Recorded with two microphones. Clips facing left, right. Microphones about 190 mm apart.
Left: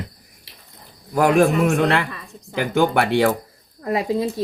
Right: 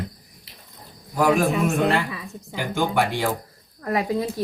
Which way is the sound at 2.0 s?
5° right (ahead or behind).